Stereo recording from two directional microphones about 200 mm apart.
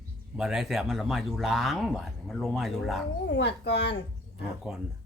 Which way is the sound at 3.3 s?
55° left (ahead or behind).